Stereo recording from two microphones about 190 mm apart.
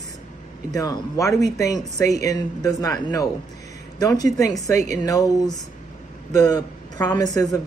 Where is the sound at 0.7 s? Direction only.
20° left (ahead or behind).